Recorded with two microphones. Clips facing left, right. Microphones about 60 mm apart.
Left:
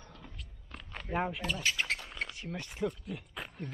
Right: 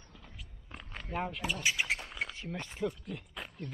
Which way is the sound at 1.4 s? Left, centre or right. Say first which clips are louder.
Even; centre.